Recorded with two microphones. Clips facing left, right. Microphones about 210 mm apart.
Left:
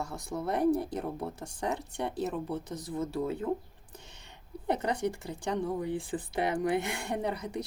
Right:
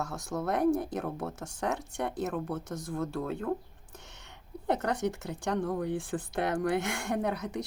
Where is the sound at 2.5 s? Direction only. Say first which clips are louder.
Even; 15° left (ahead or behind).